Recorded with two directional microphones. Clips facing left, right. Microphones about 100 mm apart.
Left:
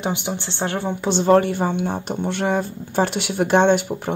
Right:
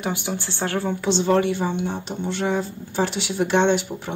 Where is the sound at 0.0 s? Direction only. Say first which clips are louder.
Left 2 dB; 20° left (ahead or behind).